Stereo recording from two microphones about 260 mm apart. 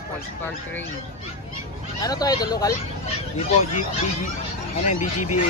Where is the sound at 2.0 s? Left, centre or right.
Centre.